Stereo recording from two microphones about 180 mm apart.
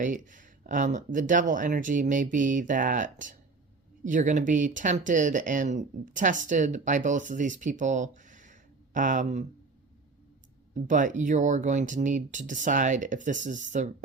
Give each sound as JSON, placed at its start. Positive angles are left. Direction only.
{"t": 0.0, "sound": "speech", "side_deg": -45}
{"t": 10.8, "sound": "speech", "side_deg": -45}